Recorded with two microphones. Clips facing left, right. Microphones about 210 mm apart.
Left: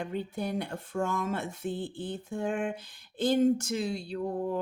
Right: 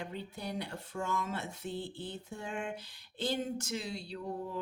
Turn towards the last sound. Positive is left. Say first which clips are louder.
# left 8 dB
turn(degrees=50)  # may be behind; listen again after turning